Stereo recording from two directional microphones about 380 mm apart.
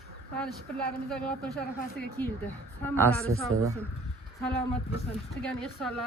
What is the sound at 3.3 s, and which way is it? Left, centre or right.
Speech, right.